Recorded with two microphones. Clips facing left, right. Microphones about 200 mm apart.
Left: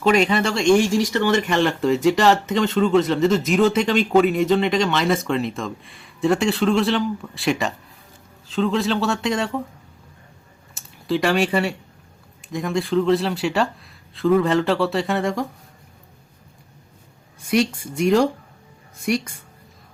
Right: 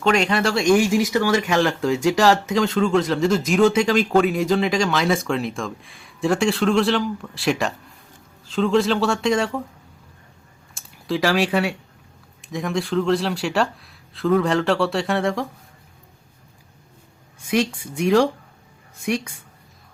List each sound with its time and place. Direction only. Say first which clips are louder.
0.0 s speech: left 1 dB; 5° left (ahead or behind)
10.8 s speech: left 1 dB; centre (ahead or behind)
17.4 s speech: left 1 dB; centre (ahead or behind)